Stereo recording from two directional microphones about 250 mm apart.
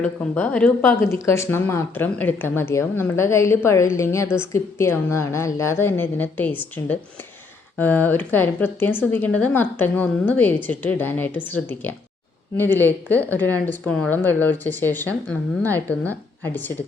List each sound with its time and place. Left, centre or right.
0.0 s speech: centre